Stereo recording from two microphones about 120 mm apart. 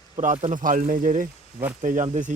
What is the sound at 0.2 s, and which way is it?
Speech, 90° right.